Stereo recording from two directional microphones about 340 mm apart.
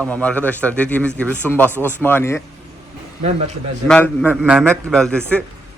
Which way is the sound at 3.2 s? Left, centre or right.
Centre.